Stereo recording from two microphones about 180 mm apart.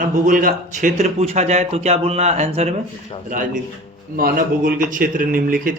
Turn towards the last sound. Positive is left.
turn(degrees=-50)  # may be behind; listen again after turning